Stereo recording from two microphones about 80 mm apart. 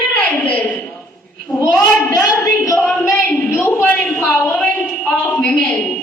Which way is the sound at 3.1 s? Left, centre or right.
Left.